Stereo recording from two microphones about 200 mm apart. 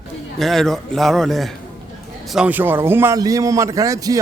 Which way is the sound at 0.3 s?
Centre (ahead or behind).